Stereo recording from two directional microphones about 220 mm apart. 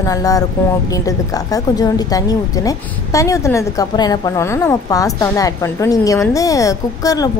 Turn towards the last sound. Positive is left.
turn(degrees=15)  # may be behind; listen again after turning